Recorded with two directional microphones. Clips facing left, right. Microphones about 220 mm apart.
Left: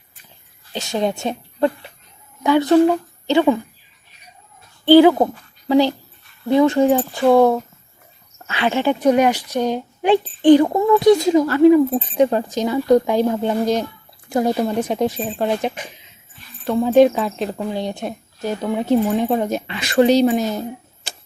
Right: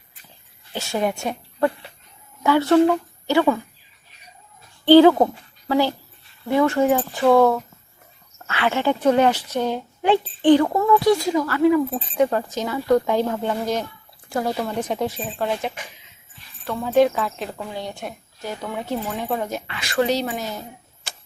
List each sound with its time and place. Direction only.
0.7 s speech: 20° left (ahead or behind)
2.4 s a woman's voice: 15° left (ahead or behind)
4.9 s speech: 10° left (ahead or behind)